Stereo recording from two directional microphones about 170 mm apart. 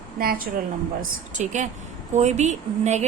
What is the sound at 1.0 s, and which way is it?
A woman's voice, 45° right (ahead or behind).